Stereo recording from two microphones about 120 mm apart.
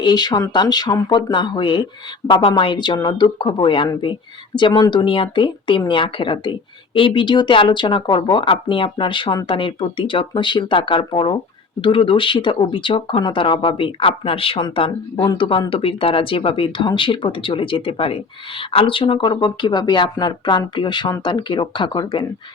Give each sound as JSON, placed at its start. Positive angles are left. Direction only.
{"t": 0.0, "sound": "speech", "side_deg": 35}